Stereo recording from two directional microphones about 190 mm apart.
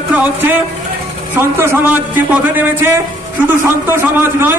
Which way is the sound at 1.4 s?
10° right (ahead or behind).